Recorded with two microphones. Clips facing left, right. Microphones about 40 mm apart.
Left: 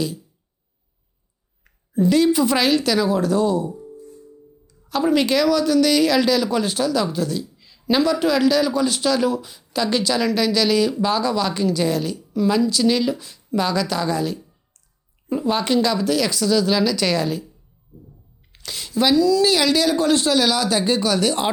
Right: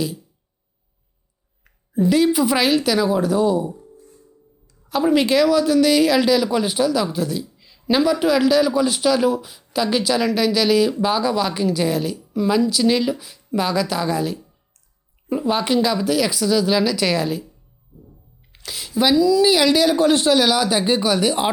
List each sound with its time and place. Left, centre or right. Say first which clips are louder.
1.6 s speech: even; centre
4.9 s a woman's voice: right 1 dB; centre
18.5 s speech: even; centre